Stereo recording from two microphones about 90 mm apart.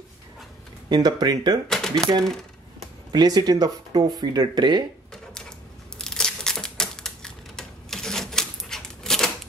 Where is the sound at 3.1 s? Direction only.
50° right (ahead or behind).